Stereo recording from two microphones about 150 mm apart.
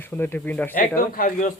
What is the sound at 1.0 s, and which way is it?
Speech, 65° left (ahead or behind).